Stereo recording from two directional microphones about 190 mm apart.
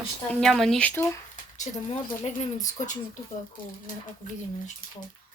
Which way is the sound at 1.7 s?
35° left (ahead or behind).